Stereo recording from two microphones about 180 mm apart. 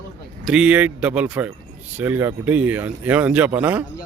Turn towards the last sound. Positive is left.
turn(degrees=-10)  # may be behind; listen again after turning